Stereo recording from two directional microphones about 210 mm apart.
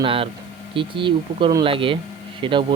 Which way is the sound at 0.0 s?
25° right (ahead or behind).